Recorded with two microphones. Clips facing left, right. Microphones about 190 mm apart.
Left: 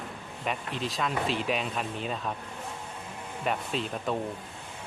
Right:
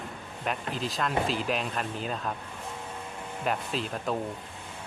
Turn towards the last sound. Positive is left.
turn(degrees=0)  # may be behind; listen again after turning